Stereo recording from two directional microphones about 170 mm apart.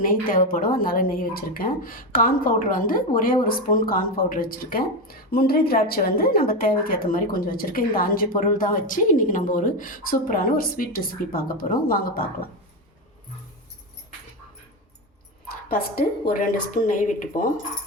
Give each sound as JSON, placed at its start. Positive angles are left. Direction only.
{"t": 0.0, "sound": "speech", "side_deg": 55}
{"t": 15.7, "sound": "speech", "side_deg": 60}